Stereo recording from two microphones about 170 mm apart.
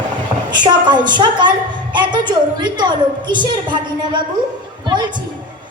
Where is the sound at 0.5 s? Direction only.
25° right (ahead or behind).